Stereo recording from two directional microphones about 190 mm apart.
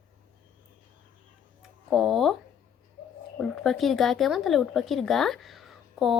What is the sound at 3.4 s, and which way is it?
Speech, centre (ahead or behind).